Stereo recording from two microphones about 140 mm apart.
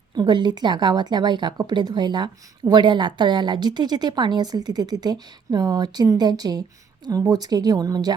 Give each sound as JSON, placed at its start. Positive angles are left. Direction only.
{"t": 0.2, "sound": "speech", "side_deg": -30}